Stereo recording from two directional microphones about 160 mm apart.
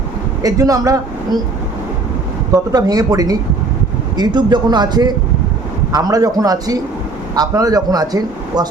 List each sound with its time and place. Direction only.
0.4 s speech: 20° right (ahead or behind)
2.7 s speech: 25° right (ahead or behind)